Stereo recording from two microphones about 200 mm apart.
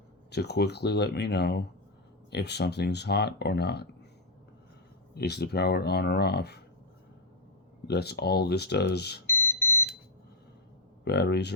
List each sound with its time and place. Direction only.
0.3 s speech: 55° left (ahead or behind)
5.1 s speech: 55° left (ahead or behind)
7.9 s speech: 55° left (ahead or behind)
9.2 s smoke detector: 10° left (ahead or behind)
11.0 s speech: 55° left (ahead or behind)